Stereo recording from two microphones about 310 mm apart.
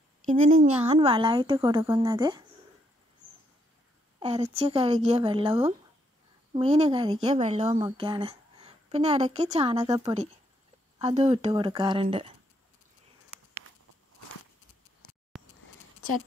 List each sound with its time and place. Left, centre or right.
0.3 s a woman's voice: right
4.2 s a woman's voice: centre
15.3 s keys jangling: centre